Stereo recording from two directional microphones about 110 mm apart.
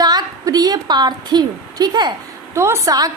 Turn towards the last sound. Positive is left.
turn(degrees=-35)  # may be behind; listen again after turning